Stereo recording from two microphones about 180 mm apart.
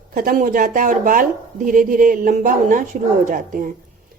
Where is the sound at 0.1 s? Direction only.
50° right (ahead or behind).